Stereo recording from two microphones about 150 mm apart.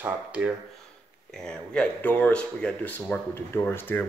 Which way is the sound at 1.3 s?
5° left (ahead or behind).